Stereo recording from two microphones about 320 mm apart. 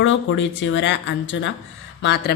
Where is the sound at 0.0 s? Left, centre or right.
Left.